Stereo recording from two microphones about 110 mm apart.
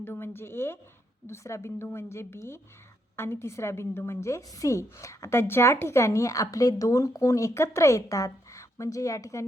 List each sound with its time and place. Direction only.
0.0 s a woman's voice: 20° left (ahead or behind)